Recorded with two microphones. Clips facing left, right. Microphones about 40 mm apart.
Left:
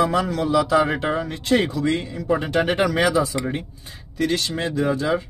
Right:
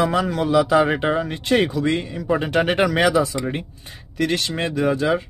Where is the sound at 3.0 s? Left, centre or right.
Right.